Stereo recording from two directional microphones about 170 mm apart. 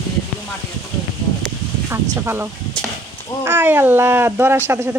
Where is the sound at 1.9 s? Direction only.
15° right (ahead or behind).